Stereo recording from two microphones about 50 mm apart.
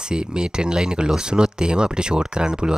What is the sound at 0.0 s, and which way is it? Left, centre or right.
Speech, centre.